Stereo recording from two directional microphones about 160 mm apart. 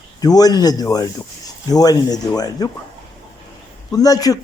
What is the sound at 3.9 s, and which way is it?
Speech, 25° left (ahead or behind).